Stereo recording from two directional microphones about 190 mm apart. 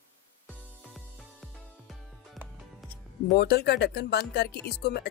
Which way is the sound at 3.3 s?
60° left (ahead or behind).